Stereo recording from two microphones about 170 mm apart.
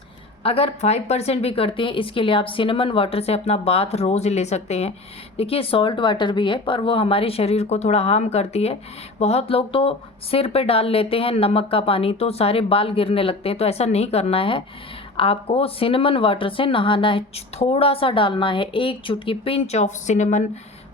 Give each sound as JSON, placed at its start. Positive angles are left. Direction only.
{"t": 0.4, "sound": "speech", "side_deg": 35}